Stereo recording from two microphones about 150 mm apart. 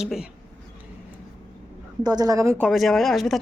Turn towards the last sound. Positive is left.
turn(degrees=0)  # may be behind; listen again after turning